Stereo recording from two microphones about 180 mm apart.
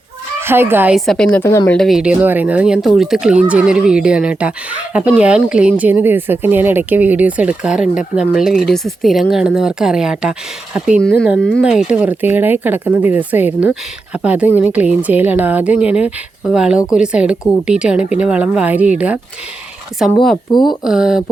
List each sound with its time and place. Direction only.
0.3 s speech: 15° right (ahead or behind)
0.9 s a woman's voice: centre (ahead or behind)
20.7 s a woman's voice: 5° right (ahead or behind)